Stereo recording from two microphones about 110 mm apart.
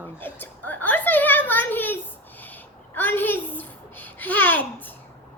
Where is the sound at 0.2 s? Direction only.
15° left (ahead or behind).